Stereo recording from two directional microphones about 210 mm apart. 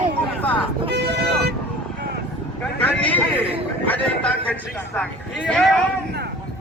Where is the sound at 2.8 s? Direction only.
10° left (ahead or behind).